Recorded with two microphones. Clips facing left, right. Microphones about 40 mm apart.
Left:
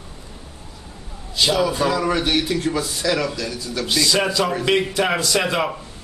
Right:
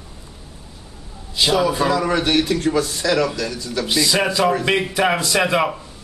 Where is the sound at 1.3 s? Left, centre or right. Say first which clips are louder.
Right 1 dB; centre.